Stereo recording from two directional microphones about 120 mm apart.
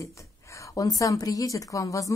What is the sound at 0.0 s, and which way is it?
A woman's voice, 25° left (ahead or behind).